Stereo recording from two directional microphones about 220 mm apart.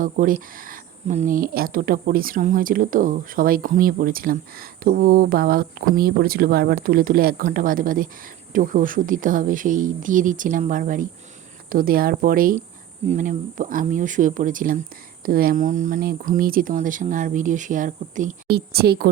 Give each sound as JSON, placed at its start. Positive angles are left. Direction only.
{"t": 0.0, "sound": "speech", "side_deg": -40}